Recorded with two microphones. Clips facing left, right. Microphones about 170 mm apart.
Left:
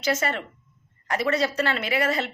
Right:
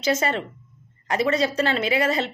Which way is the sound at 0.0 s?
20° right (ahead or behind).